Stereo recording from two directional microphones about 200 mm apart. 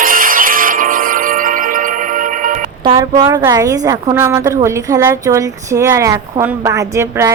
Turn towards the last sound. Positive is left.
turn(degrees=-15)  # may be behind; listen again after turning